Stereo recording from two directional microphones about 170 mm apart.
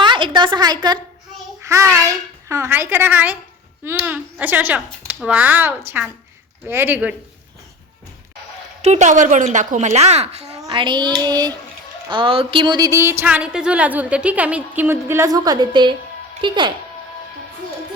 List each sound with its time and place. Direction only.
0.0 s a sound: 30° right (ahead or behind)
1.6 s speech: 15° right (ahead or behind)
8.8 s a woman's voice: 40° right (ahead or behind)
10.6 s a child's voice: 30° right (ahead or behind)